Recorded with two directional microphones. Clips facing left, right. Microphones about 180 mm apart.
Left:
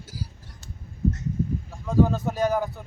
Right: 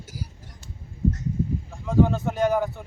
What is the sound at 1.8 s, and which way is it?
Speech, centre (ahead or behind).